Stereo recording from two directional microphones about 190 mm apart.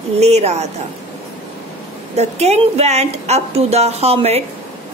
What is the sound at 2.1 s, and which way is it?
A woman's voice, 35° right (ahead or behind).